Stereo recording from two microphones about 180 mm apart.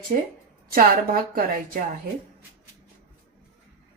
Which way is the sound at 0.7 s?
50° right (ahead or behind).